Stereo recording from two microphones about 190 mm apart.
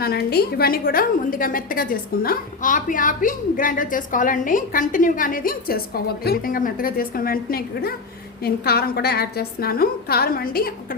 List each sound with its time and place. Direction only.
0.0 s a woman's voice: 55° left (ahead or behind)